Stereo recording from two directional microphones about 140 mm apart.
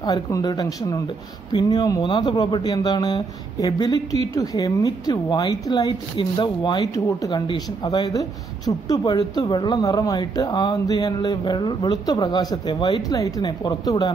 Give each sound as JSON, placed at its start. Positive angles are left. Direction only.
{"t": 0.0, "sound": "a woman's voice", "side_deg": 25}